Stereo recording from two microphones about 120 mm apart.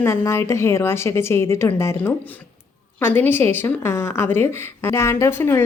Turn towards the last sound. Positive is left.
turn(degrees=20)  # may be behind; listen again after turning